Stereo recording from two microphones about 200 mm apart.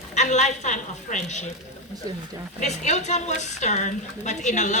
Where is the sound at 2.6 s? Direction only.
35° left (ahead or behind).